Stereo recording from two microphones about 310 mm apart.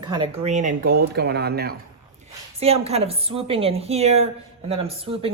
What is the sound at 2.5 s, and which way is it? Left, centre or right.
A woman's voice, centre.